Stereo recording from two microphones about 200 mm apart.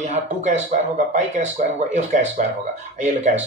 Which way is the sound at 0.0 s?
35° right (ahead or behind).